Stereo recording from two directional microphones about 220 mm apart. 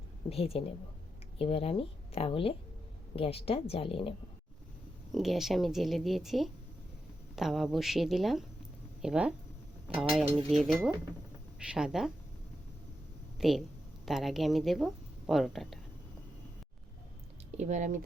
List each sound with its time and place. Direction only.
0.3 s speech: 25° left (ahead or behind)
5.1 s speech: centre (ahead or behind)
13.4 s a woman's voice: centre (ahead or behind)
17.6 s speech: 35° right (ahead or behind)